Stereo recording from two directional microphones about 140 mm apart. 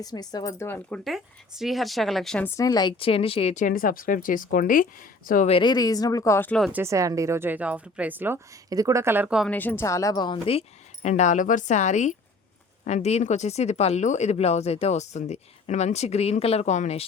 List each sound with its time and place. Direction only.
0.0 s speech: 30° left (ahead or behind)
0.7 s speech: 5° left (ahead or behind)
2.4 s speech: 25° left (ahead or behind)
3.0 s speech: 40° left (ahead or behind)
3.5 s a woman's voice: 75° left (ahead or behind)
5.5 s speech: 35° left (ahead or behind); by 6.6 s 15° left (ahead or behind)
6.7 s speech: 15° right (ahead or behind)
8.7 s a woman's voice: 25° right (ahead or behind)
9.5 s speech: 15° left (ahead or behind); by 17.1 s 50° left (ahead or behind)